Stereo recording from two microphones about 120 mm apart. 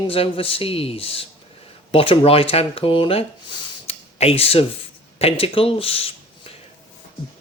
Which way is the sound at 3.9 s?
55° left (ahead or behind).